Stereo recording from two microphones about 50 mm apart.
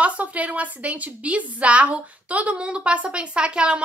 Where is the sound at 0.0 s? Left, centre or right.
Right.